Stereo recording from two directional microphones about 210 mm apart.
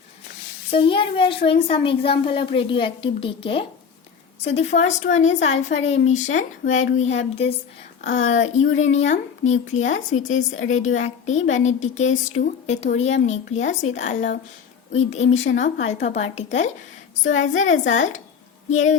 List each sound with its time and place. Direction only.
0.7 s a woman's voice: 25° left (ahead or behind)